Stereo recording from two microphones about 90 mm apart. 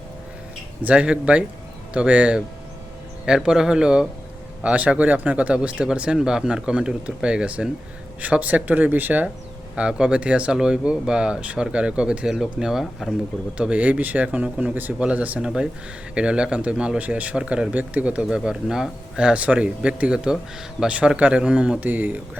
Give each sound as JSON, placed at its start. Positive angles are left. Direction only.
{"t": 0.8, "sound": "speech", "side_deg": -15}
{"t": 13.6, "sound": "speech", "side_deg": -15}